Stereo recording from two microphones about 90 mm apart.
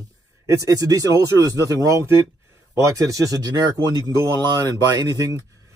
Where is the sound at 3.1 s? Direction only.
40° right (ahead or behind).